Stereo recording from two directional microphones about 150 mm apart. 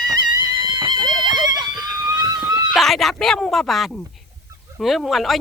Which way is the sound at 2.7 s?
Centre (ahead or behind).